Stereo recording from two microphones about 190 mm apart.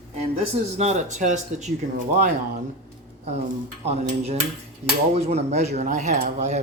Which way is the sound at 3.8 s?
35° right (ahead or behind).